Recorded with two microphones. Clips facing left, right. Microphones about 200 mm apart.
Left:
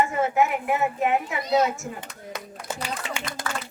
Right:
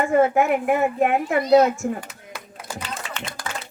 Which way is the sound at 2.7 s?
25° left (ahead or behind).